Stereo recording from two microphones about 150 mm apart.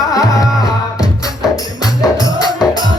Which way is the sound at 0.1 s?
25° left (ahead or behind).